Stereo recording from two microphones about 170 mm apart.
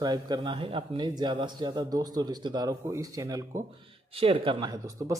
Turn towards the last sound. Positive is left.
turn(degrees=-20)  # may be behind; listen again after turning